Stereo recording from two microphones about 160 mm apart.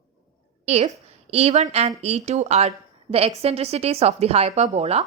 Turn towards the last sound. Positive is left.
turn(degrees=-40)  # may be behind; listen again after turning